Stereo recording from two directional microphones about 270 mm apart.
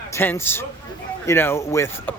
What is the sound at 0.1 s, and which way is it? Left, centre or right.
Speech, centre.